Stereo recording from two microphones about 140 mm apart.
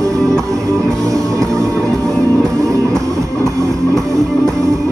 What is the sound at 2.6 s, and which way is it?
Music, 25° right (ahead or behind).